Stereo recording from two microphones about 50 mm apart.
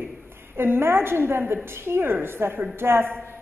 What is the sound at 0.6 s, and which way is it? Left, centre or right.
A woman's voice, right.